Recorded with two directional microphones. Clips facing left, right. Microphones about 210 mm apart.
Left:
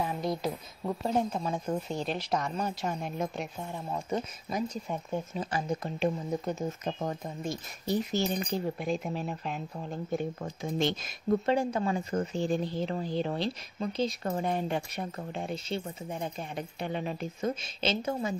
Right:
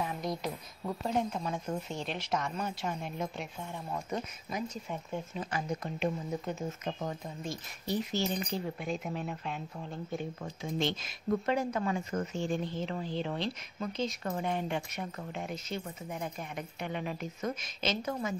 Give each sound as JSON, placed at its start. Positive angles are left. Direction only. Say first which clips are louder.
{"t": 0.2, "sound": "speech", "louder": "left 4 dB", "side_deg": 30}
{"t": 11.4, "sound": "speech", "louder": "left 3 dB", "side_deg": 30}